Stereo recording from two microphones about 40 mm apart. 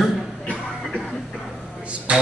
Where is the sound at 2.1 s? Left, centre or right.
Right.